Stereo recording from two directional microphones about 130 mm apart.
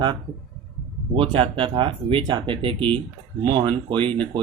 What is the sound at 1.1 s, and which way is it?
Speech, 40° right (ahead or behind).